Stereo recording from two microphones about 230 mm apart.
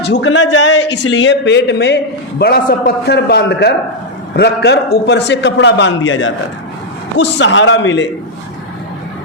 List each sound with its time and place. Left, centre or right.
0.0 s a man's voice: left